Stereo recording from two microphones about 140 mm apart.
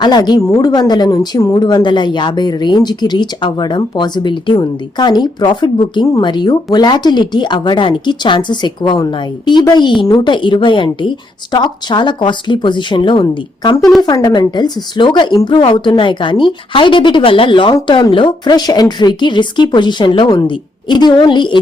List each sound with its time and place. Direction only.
0.0 s a woman's voice: 30° left (ahead or behind)